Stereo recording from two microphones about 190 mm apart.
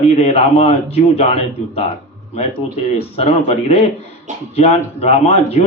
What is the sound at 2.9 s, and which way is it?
Speech, 35° left (ahead or behind).